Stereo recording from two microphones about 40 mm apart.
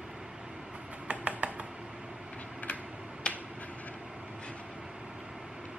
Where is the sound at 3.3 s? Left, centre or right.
Left.